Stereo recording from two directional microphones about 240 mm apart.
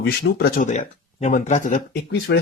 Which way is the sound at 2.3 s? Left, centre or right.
Left.